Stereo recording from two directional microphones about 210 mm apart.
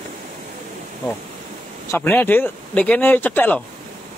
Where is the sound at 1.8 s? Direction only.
10° left (ahead or behind).